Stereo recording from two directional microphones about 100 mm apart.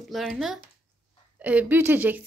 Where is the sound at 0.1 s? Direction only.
Centre (ahead or behind).